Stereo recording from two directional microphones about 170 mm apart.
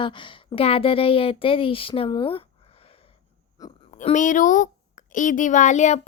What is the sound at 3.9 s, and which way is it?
Speech, 45° left (ahead or behind).